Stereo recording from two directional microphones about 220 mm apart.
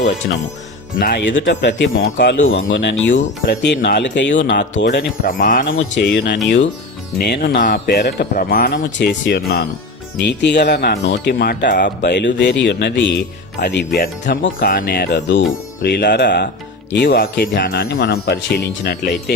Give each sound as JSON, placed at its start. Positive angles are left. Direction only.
{"t": 0.9, "sound": "speech", "side_deg": 45}
{"t": 1.4, "sound": "speech", "side_deg": 55}
{"t": 3.1, "sound": "speech", "side_deg": 35}
{"t": 3.8, "sound": "speech", "side_deg": 50}
{"t": 5.2, "sound": "speech", "side_deg": 40}